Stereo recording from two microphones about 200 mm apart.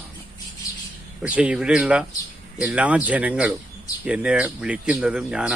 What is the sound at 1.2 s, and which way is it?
Speech, 5° right (ahead or behind).